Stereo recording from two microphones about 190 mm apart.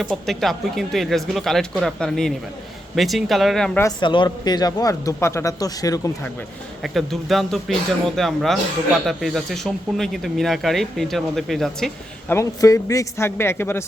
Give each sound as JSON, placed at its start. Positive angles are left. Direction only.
{"t": 0.0, "sound": "speech", "side_deg": 0}
{"t": 4.0, "sound": "a man's voice", "side_deg": 25}
{"t": 6.8, "sound": "speech", "side_deg": 0}
{"t": 12.3, "sound": "a man's voice", "side_deg": 15}